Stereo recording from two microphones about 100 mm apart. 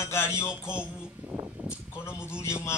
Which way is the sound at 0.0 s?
25° left (ahead or behind).